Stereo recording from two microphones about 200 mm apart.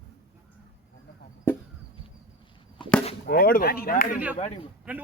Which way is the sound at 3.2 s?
50° left (ahead or behind).